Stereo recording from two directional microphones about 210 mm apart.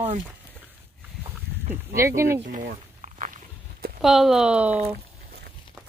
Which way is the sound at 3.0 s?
40° right (ahead or behind).